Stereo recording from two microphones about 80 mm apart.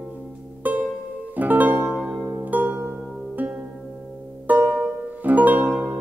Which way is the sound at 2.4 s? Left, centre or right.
Right.